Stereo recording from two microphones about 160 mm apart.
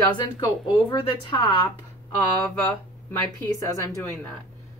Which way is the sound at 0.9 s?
30° left (ahead or behind).